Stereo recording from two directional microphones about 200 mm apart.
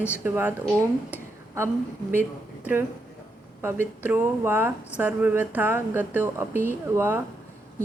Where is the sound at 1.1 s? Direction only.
10° right (ahead or behind).